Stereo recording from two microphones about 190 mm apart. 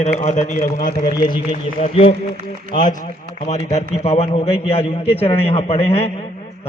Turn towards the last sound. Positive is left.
turn(degrees=30)  # may be behind; listen again after turning